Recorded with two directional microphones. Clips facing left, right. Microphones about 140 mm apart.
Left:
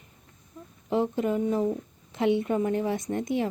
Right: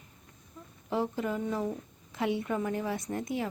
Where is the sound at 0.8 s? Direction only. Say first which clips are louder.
Left 5 dB; 20° left (ahead or behind).